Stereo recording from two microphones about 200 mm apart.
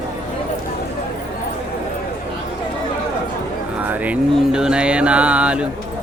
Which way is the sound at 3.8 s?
5° right (ahead or behind).